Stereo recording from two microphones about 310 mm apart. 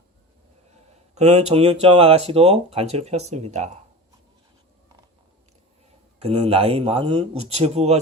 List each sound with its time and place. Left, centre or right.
1.1 s speech: centre
6.2 s speech: centre